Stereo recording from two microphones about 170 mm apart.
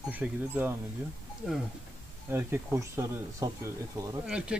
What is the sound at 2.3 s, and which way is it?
Speech, 15° right (ahead or behind).